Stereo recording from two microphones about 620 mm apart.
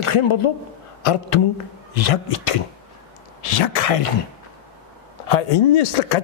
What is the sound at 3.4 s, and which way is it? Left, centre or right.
Speech, left.